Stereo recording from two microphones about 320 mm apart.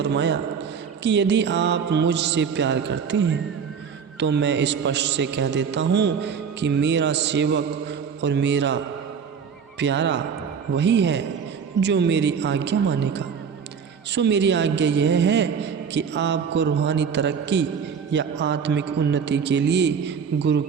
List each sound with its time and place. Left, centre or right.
0.0 s a man's voice: right